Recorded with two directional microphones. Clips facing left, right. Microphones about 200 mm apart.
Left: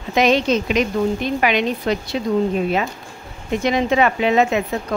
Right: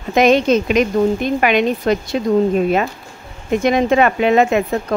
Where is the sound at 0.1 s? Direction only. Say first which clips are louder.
Right 4 dB; 50° right (ahead or behind).